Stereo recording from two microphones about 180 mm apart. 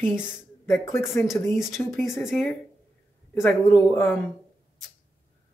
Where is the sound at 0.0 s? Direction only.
5° right (ahead or behind).